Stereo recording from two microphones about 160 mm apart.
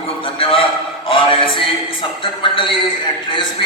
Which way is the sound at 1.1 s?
30° left (ahead or behind).